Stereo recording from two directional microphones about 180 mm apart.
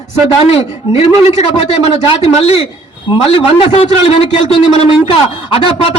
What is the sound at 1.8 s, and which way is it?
A man's voice, 35° left (ahead or behind).